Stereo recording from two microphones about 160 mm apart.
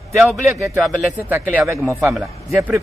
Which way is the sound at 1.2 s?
15° right (ahead or behind).